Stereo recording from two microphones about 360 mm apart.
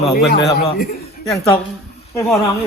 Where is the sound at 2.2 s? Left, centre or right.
Centre.